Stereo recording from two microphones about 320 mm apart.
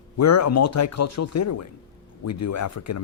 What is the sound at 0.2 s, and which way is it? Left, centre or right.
Speech, left.